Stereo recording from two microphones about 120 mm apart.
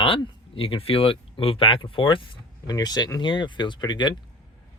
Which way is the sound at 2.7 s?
35° left (ahead or behind).